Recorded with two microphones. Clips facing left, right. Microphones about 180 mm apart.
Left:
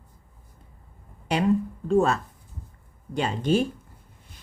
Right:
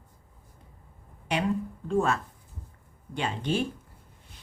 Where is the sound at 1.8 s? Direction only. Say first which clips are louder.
Left 4 dB; 35° left (ahead or behind).